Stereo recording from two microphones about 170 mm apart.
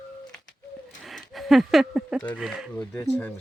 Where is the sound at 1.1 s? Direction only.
Centre (ahead or behind).